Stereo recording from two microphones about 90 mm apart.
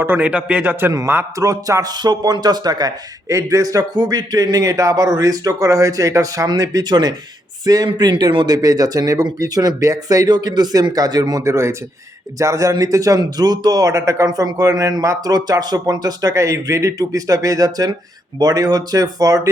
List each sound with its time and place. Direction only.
0.0 s a man's voice: 25° right (ahead or behind); by 19.4 s 40° right (ahead or behind)